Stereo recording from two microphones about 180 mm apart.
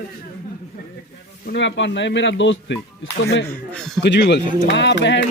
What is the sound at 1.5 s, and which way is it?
A man's voice, 90° left.